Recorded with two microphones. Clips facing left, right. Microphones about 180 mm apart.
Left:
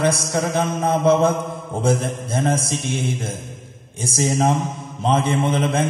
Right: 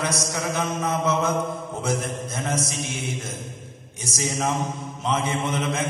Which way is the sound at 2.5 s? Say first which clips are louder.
Left 4 dB; 30° left (ahead or behind).